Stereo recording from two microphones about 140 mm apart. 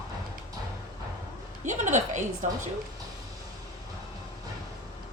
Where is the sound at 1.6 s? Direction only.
60° right (ahead or behind).